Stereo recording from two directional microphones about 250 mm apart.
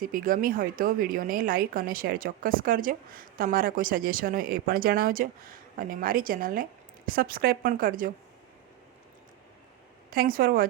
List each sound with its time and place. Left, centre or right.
0.0 s a woman's voice: right
10.1 s a woman's voice: right